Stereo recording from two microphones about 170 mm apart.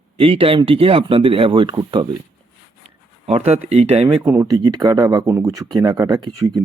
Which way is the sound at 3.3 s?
40° right (ahead or behind).